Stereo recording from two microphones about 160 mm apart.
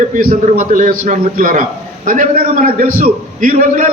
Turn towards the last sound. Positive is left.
turn(degrees=-55)  # may be behind; listen again after turning